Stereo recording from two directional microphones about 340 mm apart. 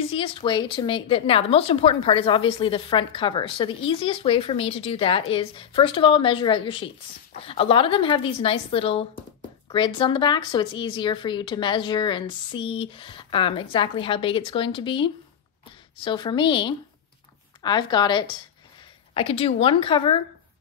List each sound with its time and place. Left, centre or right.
0.1 s speech: centre